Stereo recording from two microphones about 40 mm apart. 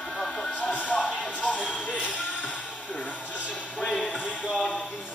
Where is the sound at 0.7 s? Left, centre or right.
Left.